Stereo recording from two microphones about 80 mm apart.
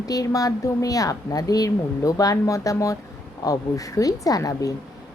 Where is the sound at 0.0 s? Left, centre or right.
Left.